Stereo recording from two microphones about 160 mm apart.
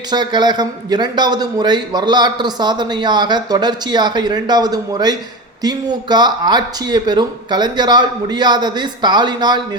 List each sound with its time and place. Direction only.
0.1 s a man's voice: 25° right (ahead or behind)